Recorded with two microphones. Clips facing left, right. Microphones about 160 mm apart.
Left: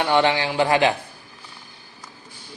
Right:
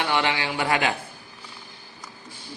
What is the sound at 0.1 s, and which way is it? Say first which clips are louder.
Speech: left 5 dB; 35° left (ahead or behind).